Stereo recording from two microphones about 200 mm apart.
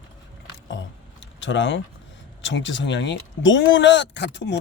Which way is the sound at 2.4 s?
65° left (ahead or behind).